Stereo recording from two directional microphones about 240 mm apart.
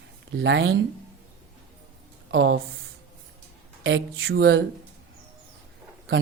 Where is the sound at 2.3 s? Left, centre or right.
Right.